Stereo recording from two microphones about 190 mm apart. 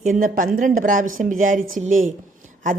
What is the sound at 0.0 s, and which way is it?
A woman's voice, 45° right (ahead or behind).